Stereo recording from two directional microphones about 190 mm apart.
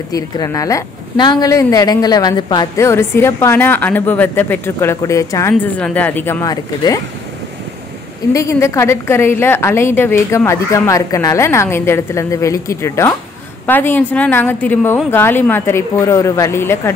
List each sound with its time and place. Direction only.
0.1 s a woman's voice: 20° left (ahead or behind)
8.3 s a woman's voice: 15° left (ahead or behind)